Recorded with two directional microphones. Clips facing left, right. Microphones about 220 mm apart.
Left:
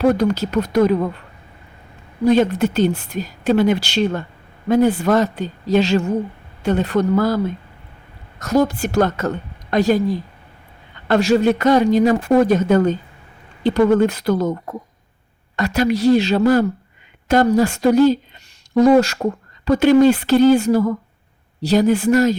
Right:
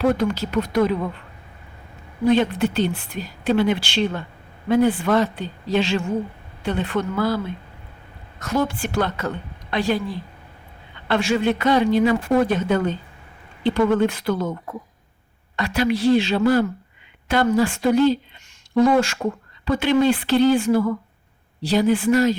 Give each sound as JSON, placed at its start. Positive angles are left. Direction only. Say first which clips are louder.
{"t": 0.0, "sound": "speech", "louder": "left 4 dB", "side_deg": 40}
{"t": 2.2, "sound": "a woman's voice", "louder": "left 3 dB", "side_deg": 45}